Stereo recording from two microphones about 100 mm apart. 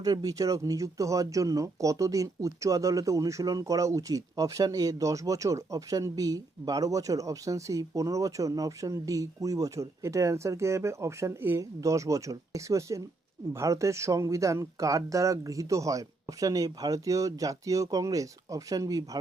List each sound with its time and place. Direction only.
0.0 s speech: 40° right (ahead or behind)